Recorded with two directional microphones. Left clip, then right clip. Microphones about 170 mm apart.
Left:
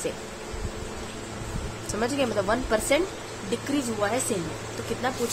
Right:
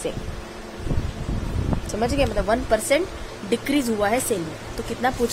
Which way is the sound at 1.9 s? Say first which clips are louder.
Right 3 dB; 15° right (ahead or behind).